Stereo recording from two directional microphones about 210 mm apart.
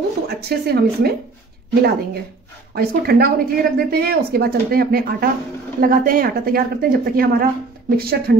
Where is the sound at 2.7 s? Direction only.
45° right (ahead or behind).